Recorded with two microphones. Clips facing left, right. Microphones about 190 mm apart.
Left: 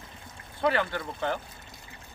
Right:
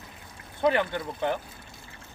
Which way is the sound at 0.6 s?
20° right (ahead or behind).